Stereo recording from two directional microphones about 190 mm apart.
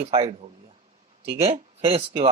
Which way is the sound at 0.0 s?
30° right (ahead or behind).